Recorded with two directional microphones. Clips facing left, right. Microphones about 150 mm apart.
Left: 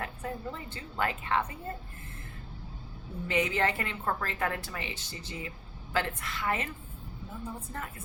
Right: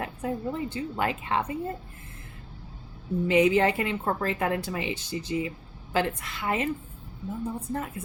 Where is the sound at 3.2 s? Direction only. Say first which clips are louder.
Right 8 dB; 15° right (ahead or behind).